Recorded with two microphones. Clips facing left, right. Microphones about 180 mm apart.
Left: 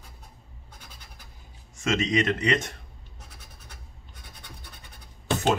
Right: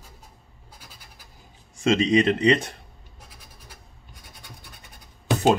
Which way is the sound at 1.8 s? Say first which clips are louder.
Right 6 dB; 30° right (ahead or behind).